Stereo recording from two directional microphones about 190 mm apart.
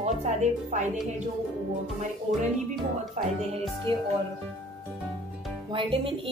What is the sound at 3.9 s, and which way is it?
Speech, 25° right (ahead or behind).